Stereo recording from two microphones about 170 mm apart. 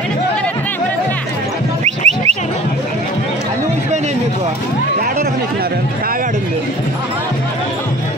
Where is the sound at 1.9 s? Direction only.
40° right (ahead or behind).